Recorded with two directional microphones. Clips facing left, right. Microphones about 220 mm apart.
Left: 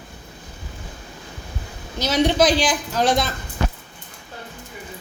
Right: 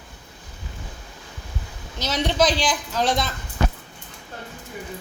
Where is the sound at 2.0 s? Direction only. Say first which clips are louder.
Left 4 dB; 10° left (ahead or behind).